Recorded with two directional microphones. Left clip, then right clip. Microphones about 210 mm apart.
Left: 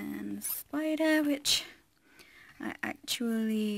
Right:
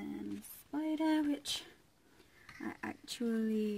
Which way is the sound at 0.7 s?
20° left (ahead or behind).